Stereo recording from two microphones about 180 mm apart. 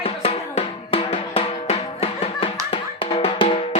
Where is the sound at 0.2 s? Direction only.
30° left (ahead or behind).